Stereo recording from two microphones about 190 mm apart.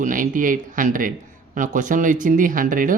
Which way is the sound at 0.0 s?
45° right (ahead or behind).